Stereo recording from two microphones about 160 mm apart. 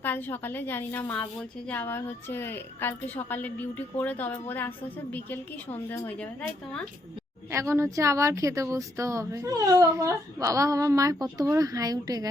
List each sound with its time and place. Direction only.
0.0 s a woman's voice: 10° left (ahead or behind)
5.9 s a woman's voice: 10° left (ahead or behind)
7.5 s speech: 20° right (ahead or behind)